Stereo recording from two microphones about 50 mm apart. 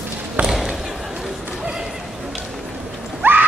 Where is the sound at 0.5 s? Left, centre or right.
Centre.